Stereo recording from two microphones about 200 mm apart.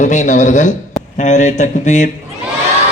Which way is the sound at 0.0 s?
35° left (ahead or behind).